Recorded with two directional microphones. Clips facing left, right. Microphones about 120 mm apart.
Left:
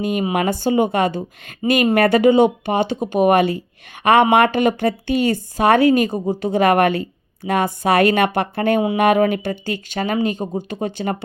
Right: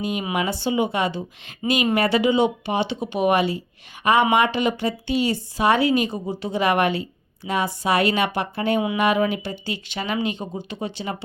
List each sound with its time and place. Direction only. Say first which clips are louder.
0.0 s a woman's voice: left 5 dB; 50° left (ahead or behind)